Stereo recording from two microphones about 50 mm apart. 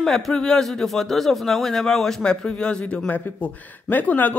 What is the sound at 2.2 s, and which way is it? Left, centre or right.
A man's voice, centre.